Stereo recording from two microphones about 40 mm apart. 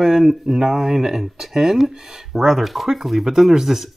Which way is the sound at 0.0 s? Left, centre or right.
Centre.